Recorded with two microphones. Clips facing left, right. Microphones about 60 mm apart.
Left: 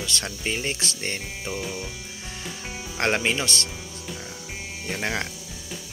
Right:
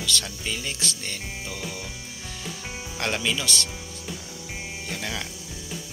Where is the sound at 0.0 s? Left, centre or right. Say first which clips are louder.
Even; left.